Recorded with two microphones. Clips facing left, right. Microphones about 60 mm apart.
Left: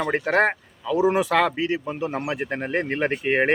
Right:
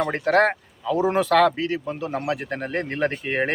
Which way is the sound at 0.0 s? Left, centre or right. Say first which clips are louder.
Right 1 dB; centre.